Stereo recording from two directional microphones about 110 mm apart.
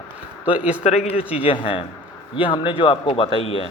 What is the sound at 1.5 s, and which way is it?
Speech, 55° left (ahead or behind).